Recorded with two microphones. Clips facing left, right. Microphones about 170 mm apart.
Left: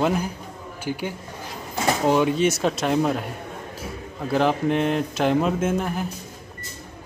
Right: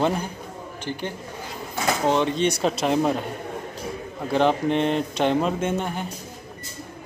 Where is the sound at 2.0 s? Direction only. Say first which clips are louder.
Left 2 dB; 10° left (ahead or behind).